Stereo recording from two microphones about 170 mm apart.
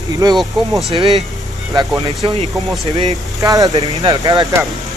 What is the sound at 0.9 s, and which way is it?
Speech, 35° right (ahead or behind).